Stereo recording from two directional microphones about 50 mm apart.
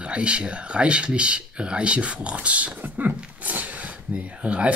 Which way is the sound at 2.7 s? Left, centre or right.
Right.